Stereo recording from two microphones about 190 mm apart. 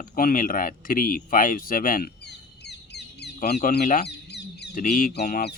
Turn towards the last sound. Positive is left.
turn(degrees=60)  # may be behind; listen again after turning